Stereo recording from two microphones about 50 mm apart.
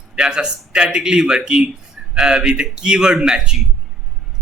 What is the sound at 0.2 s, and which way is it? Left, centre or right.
Speech, centre.